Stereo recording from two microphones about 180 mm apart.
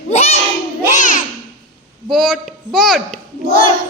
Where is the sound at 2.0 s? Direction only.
Centre (ahead or behind).